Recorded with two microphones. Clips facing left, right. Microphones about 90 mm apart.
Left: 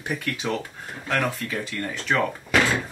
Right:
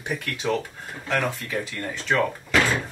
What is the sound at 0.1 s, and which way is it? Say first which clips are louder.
Speech: right 1 dB; centre (ahead or behind).